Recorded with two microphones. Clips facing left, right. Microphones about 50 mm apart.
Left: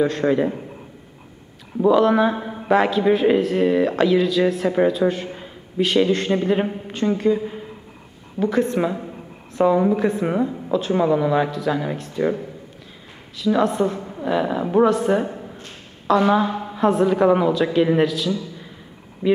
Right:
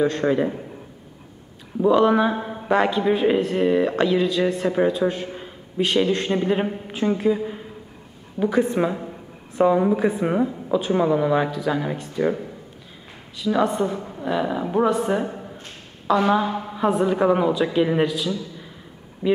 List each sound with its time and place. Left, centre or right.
0.0 s a man's voice: centre
1.8 s a man's voice: centre
13.4 s a man's voice: centre
19.2 s speech: left